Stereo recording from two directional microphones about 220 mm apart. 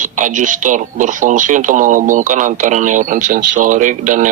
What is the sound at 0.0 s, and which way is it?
Speech, 35° right (ahead or behind).